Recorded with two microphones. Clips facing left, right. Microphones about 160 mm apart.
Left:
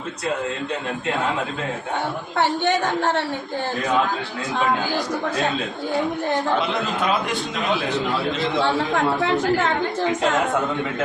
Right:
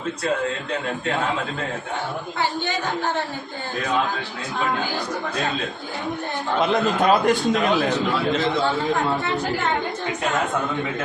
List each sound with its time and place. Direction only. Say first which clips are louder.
2.4 s a woman's voice: left 6 dB; 70° left (ahead or behind)
7.0 s a man's voice: right 6 dB; 40° right (ahead or behind)